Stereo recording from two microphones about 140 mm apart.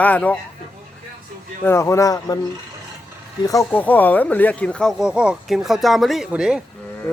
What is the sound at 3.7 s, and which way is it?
Speech, 10° left (ahead or behind).